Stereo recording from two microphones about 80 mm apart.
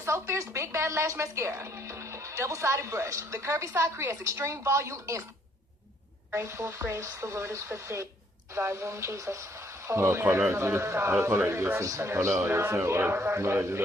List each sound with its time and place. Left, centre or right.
0.0 s speech: right
6.3 s speech: right